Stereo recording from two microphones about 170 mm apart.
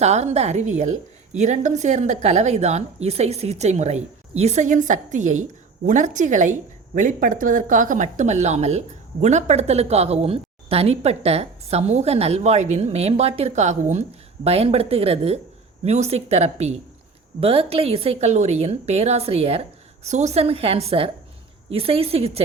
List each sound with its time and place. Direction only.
0.0 s a woman's voice: 40° right (ahead or behind)